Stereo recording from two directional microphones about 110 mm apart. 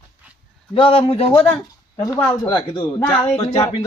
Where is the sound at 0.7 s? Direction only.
55° left (ahead or behind).